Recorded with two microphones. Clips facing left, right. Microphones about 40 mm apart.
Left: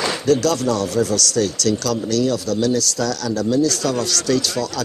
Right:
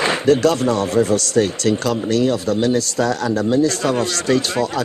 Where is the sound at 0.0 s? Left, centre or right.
Right.